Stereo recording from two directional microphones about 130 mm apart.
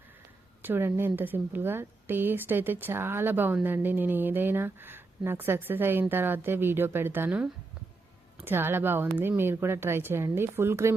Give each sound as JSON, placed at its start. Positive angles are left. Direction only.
{"t": 0.6, "sound": "a woman's voice", "side_deg": -15}